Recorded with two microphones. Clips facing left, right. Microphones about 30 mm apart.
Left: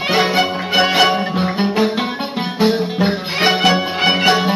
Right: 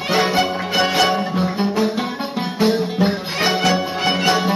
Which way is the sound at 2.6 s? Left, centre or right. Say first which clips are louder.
Left 1 dB; left.